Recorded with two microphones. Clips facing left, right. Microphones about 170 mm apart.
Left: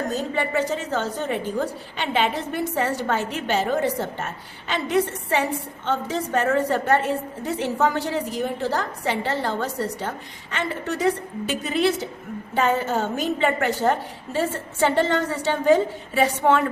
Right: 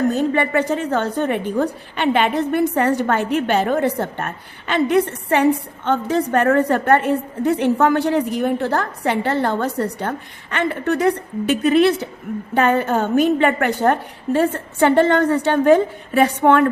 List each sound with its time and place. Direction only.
0.1 s a woman's voice: 60° right (ahead or behind)